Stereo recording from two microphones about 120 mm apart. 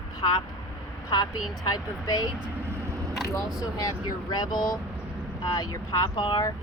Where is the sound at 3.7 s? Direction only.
35° left (ahead or behind).